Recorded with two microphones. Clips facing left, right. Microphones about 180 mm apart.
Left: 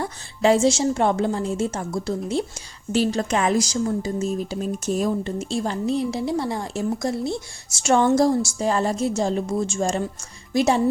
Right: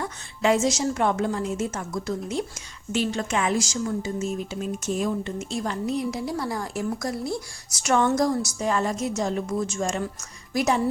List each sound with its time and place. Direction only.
0.0 s a woman's voice: 30° left (ahead or behind)